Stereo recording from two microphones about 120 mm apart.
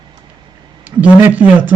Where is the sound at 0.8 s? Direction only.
10° right (ahead or behind).